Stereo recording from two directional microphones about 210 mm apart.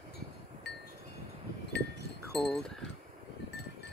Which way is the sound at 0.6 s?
55° left (ahead or behind).